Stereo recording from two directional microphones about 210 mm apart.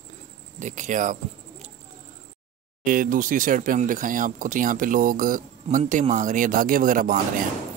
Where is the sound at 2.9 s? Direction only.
40° right (ahead or behind).